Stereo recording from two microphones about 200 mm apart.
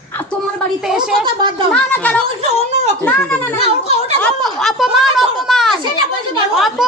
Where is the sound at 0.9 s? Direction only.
Centre (ahead or behind).